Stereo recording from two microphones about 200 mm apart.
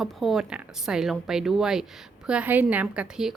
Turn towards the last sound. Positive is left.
turn(degrees=-5)  # may be behind; listen again after turning